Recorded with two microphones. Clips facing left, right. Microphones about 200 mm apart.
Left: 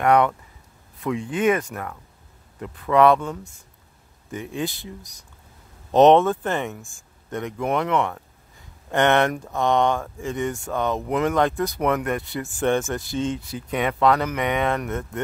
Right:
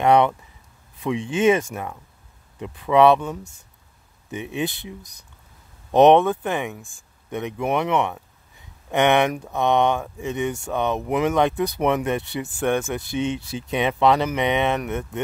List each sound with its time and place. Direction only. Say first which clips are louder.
0.0 s speech: right 1 dB; 25° right (ahead or behind)
2.6 s speech: right 1 dB; 20° right (ahead or behind)
4.3 s speech: right 1 dB; 20° right (ahead or behind)
5.9 s speech: even; 15° right (ahead or behind)
12.5 s speech: left 1 dB; 10° right (ahead or behind)
13.0 s speech: right 1 dB; 65° right (ahead or behind)
13.7 s speech: right 1 dB; 25° right (ahead or behind)